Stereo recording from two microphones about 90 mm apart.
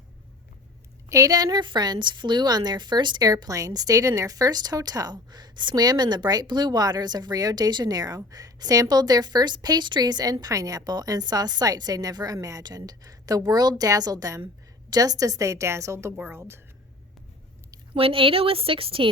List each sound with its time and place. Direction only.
1.1 s a woman's voice: 40° right (ahead or behind)
17.9 s a woman's voice: 90° right